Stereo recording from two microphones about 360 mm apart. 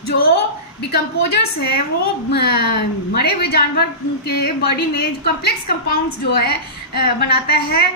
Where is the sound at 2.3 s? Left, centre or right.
Left.